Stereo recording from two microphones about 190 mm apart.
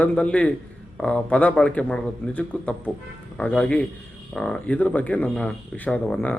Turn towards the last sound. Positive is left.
turn(degrees=5)  # may be behind; listen again after turning